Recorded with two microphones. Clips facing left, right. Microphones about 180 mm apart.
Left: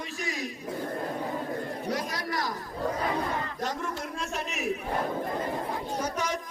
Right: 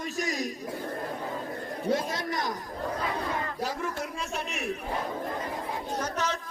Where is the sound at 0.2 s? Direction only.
40° right (ahead or behind).